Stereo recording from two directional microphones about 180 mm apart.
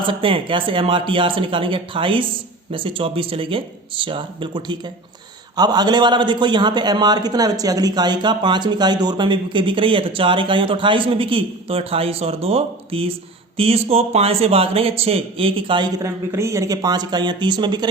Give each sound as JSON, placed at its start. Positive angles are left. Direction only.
{"t": 0.1, "sound": "a man's voice", "side_deg": -30}